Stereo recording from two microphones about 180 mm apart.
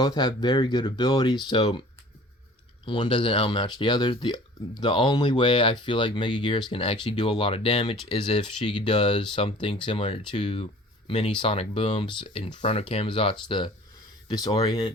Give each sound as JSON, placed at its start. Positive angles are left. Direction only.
{"t": 0.0, "sound": "speech", "side_deg": 25}
{"t": 2.8, "sound": "speech", "side_deg": 30}